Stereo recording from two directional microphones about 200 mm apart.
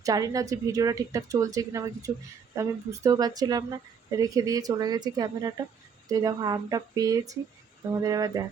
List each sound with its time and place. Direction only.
0.0 s a woman's voice: 15° right (ahead or behind)